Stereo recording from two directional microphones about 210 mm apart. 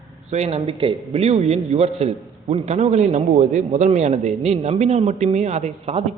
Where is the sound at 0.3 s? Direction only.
35° right (ahead or behind).